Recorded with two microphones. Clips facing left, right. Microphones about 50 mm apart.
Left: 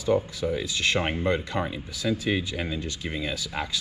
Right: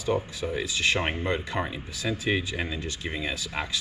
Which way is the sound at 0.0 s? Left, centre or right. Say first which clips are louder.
Left 3 dB; right.